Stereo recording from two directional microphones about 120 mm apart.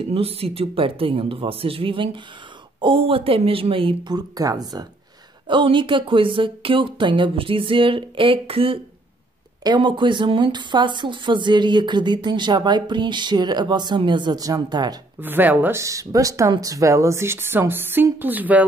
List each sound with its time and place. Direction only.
0.0 s speech: 50° right (ahead or behind)
4.1 s speech: 30° right (ahead or behind)
5.5 s speech: 45° right (ahead or behind)
9.6 s speech: 40° right (ahead or behind)
15.1 s speech: 15° right (ahead or behind)